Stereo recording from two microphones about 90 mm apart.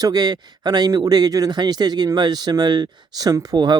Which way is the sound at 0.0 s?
45° right (ahead or behind).